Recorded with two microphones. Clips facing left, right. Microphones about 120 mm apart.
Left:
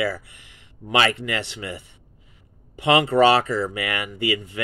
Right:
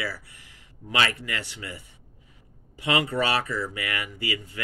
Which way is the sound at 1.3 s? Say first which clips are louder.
Left 6 dB; 75° left (ahead or behind).